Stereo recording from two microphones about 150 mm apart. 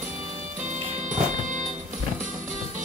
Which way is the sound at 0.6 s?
55° right (ahead or behind).